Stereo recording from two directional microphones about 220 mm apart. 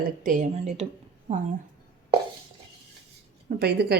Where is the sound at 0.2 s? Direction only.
35° right (ahead or behind).